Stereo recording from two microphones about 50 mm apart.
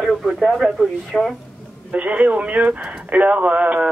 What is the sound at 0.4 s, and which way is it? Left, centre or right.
Speech, centre.